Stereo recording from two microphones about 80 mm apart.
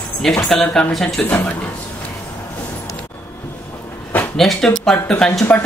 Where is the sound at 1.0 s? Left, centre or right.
Centre.